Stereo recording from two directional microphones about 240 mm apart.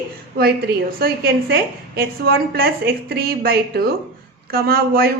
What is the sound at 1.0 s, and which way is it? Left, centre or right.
A woman's voice, right.